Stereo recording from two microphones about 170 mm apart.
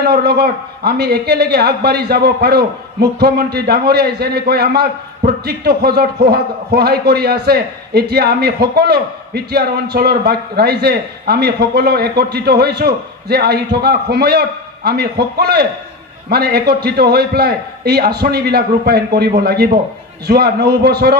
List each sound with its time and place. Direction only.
0.0 s a man's voice: 65° right (ahead or behind)